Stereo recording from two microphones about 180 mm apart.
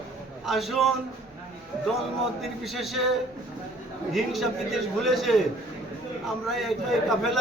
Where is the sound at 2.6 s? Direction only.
Centre (ahead or behind).